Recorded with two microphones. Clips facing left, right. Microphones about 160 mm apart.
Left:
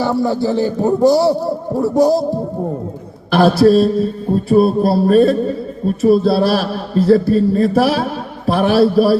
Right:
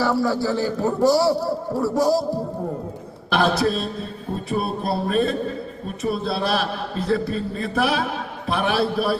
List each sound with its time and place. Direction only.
0.0 s a man's voice: 20° left (ahead or behind)
3.3 s a man's voice: 35° left (ahead or behind)